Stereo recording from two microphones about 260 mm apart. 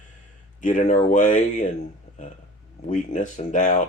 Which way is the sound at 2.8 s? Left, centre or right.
Left.